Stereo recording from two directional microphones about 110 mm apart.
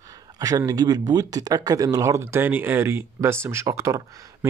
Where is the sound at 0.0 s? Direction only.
35° right (ahead or behind).